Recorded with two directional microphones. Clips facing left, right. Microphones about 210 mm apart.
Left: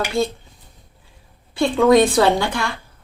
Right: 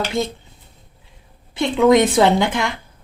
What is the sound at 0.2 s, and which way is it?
Speech, 20° right (ahead or behind).